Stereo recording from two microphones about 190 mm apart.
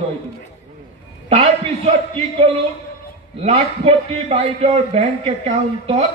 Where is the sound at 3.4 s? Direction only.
35° right (ahead or behind).